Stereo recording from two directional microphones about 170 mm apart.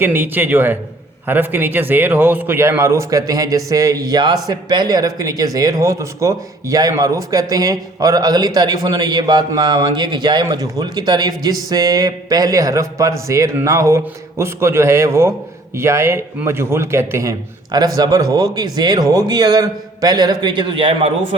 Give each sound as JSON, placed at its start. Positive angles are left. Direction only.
{"t": 0.0, "sound": "a man's voice", "side_deg": -10}